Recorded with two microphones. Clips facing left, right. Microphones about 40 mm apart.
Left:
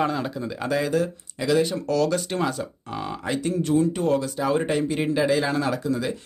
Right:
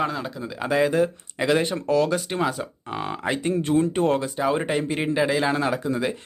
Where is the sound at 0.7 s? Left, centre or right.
Right.